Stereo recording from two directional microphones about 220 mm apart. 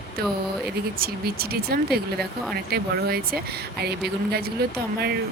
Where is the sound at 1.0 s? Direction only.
45° right (ahead or behind).